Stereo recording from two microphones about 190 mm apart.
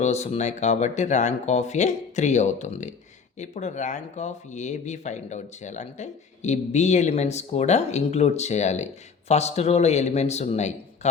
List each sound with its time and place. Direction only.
0.0 s speech: 35° left (ahead or behind)